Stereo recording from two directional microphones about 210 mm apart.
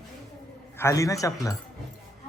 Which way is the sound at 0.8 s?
15° left (ahead or behind).